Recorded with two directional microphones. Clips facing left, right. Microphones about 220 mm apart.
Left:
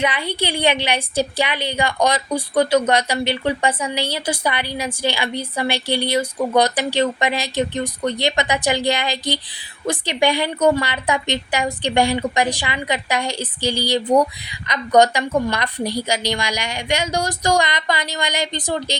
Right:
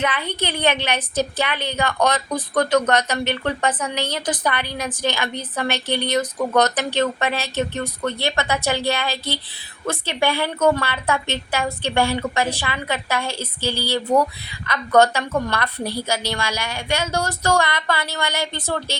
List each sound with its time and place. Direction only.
0.0 s a woman's voice: 10° left (ahead or behind)